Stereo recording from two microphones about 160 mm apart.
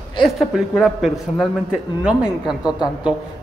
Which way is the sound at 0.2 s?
Centre (ahead or behind).